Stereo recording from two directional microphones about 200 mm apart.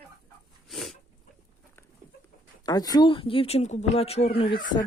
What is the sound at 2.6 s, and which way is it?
Speech, 20° left (ahead or behind).